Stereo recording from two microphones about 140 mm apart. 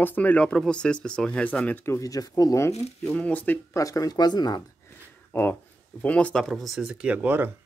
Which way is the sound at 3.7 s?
25° left (ahead or behind).